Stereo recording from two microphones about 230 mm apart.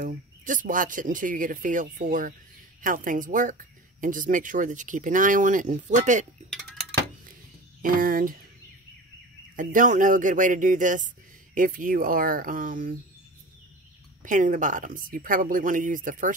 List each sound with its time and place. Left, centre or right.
0.0 s speech: right
6.5 s a sound: centre
7.8 s speech: right
9.6 s speech: right
14.2 s speech: right